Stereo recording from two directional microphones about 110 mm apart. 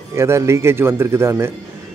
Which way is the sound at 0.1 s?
25° right (ahead or behind).